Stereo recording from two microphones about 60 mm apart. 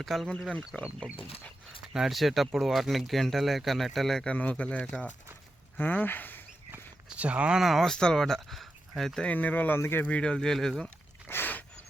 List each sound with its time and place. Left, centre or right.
0.0 s speech: centre
0.7 s speech: left
1.9 s speech: centre
4.3 s speech: left
7.2 s speech: centre
7.6 s speech: centre
7.9 s speech: centre
9.2 s speech: left
10.1 s speech: centre
11.3 s a sound: left